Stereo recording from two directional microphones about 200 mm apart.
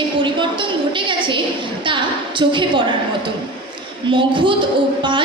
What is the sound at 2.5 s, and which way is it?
Music, 25° right (ahead or behind).